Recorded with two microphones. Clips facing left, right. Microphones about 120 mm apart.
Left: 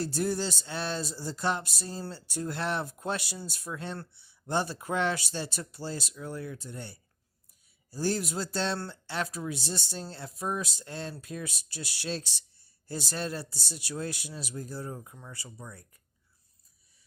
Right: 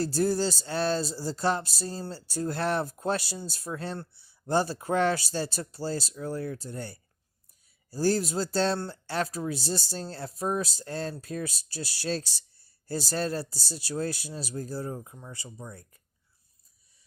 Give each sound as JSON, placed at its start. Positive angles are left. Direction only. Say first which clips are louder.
{"t": 0.0, "sound": "speech", "louder": "right 4 dB", "side_deg": -35}